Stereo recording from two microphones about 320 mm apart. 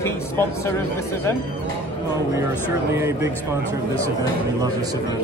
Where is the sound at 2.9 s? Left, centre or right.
Centre.